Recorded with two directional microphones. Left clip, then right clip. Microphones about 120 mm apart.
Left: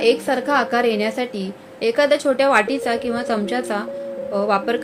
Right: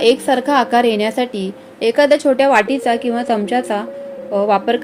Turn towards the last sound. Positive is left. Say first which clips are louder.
# right 4 dB
turn(degrees=-35)  # may be behind; listen again after turning